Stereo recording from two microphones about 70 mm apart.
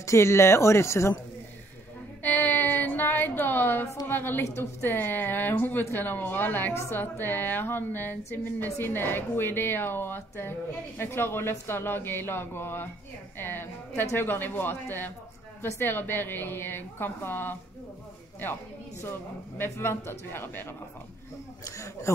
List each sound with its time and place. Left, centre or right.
0.0 s speech: left
2.2 s a sound: left
4.1 s a woman's voice: left
21.6 s speech: left